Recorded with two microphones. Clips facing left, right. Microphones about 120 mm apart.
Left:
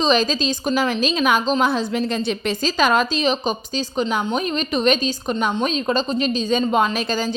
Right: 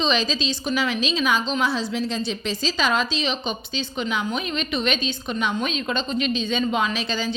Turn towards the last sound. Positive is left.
turn(degrees=45)  # may be behind; listen again after turning